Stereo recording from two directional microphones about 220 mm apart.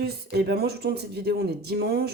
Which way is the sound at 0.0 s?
45° right (ahead or behind).